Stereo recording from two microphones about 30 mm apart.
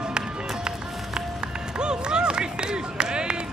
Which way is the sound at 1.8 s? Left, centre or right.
Right.